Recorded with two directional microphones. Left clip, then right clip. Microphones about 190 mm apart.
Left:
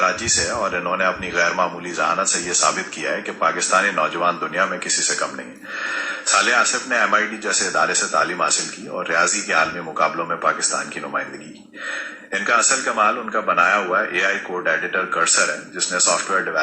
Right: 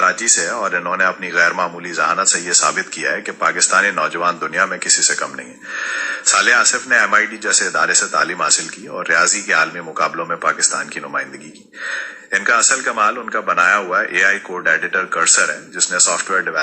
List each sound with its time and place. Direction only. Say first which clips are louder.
0.0 s a man's voice: right 4 dB; 30° right (ahead or behind)
12.5 s a man's voice: right 2 dB; 25° right (ahead or behind)